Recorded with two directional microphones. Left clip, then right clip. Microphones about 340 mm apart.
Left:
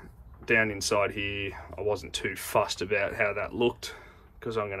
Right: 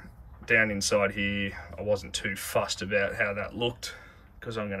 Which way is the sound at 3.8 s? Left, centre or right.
Centre.